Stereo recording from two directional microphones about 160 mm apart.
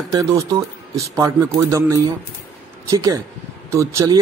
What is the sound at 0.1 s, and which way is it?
Speech, 20° right (ahead or behind).